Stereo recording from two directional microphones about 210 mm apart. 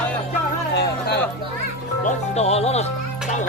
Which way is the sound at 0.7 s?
55° left (ahead or behind).